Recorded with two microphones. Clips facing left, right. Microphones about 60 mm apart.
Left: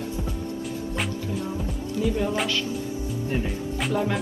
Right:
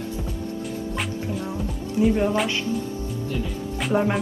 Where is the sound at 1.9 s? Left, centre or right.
Right.